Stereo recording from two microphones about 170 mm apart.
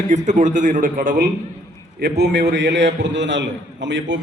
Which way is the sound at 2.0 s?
75° right (ahead or behind).